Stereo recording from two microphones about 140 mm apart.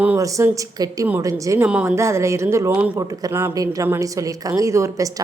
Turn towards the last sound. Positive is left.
turn(degrees=-20)  # may be behind; listen again after turning